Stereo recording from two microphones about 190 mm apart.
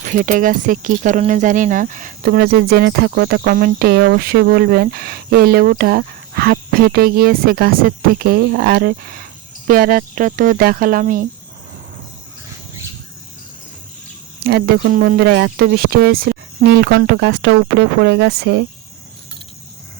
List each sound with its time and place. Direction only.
0.1 s speech: 45° right (ahead or behind)
14.4 s speech: 55° right (ahead or behind)